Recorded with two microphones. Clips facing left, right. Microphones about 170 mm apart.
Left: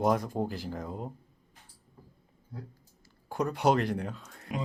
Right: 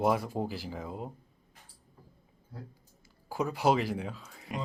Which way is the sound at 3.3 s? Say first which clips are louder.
Left 1 dB; 5° right (ahead or behind).